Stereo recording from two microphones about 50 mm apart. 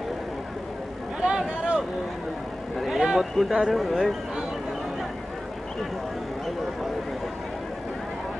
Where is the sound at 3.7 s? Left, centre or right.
Centre.